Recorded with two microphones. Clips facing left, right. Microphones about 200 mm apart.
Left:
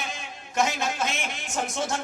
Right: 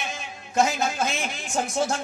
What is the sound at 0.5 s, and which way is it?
Speech, 30° right (ahead or behind).